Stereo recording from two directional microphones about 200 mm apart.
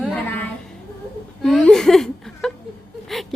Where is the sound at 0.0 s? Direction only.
10° left (ahead or behind).